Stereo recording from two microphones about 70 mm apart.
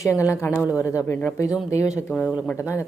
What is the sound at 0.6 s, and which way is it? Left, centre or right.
Speech, right.